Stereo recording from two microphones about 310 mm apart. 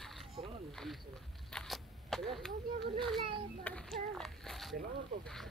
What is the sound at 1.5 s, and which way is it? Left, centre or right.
Single-lens reflex camera, centre.